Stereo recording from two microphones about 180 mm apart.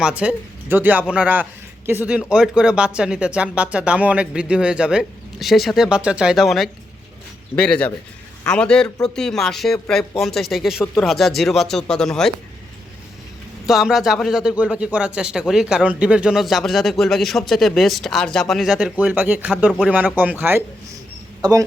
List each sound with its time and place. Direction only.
0.0 s speech: 5° right (ahead or behind)
13.7 s speech: centre (ahead or behind); by 21.6 s 20° right (ahead or behind)